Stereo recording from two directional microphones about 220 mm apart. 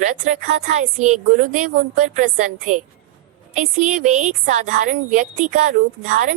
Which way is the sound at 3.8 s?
35° right (ahead or behind).